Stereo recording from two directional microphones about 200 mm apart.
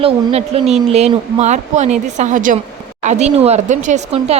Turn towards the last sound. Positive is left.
turn(degrees=-35)  # may be behind; listen again after turning